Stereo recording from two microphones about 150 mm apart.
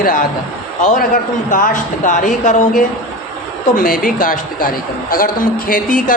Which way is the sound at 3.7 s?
70° left (ahead or behind).